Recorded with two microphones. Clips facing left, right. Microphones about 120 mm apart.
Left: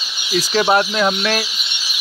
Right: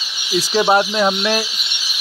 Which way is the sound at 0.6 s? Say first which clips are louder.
Right 1 dB; 20° right (ahead or behind).